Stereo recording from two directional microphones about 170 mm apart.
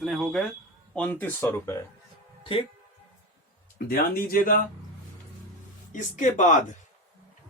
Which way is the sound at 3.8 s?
60° left (ahead or behind).